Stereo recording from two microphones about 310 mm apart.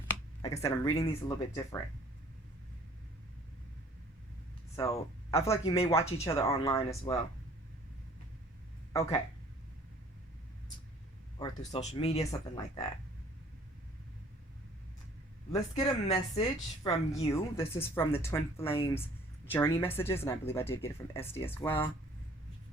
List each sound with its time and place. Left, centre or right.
0.4 s a woman's voice: centre
5.3 s a woman's voice: centre
8.9 s speech: centre
11.3 s speech: centre
15.7 s a woman's voice: centre